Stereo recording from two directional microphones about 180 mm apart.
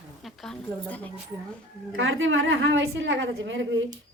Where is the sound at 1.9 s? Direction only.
90° right.